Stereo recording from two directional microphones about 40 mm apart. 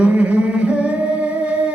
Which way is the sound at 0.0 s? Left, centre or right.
Right.